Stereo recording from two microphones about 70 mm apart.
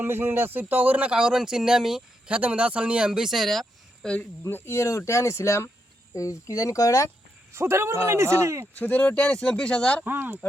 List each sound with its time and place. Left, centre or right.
0.0 s a man's voice: right; by 4.1 s centre
4.2 s speech: left
6.1 s speech: left
7.5 s a man's voice: right
8.8 s speech: left
10.1 s a man's voice: right